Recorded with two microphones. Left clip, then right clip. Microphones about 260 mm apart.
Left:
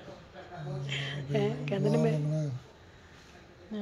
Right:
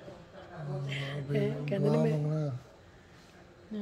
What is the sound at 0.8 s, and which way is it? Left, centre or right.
Speech, centre.